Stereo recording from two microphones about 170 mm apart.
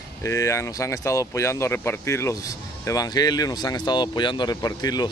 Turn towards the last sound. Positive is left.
turn(degrees=20)  # may be behind; listen again after turning